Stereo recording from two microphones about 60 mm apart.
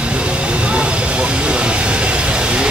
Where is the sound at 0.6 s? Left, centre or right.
Centre.